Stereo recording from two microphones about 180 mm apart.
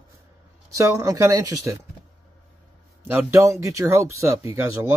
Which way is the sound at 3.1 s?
10° right (ahead or behind).